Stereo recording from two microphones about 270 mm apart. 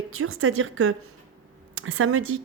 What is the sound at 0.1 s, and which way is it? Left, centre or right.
Speech, right.